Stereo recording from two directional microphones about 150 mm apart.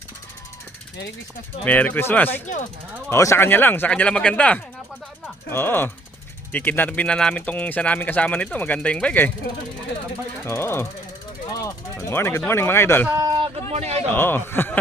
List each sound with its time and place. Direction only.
1.6 s speech: 10° left (ahead or behind)
10.4 s speech: 15° left (ahead or behind)
11.5 s a sound: 20° left (ahead or behind)
12.5 s speech: 15° left (ahead or behind)
13.1 s a sound: 25° right (ahead or behind)
13.7 s a man's voice: 45° right (ahead or behind)
14.1 s speech: 15° left (ahead or behind)